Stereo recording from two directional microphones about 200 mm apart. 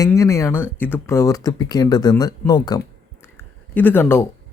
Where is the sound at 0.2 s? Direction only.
15° left (ahead or behind).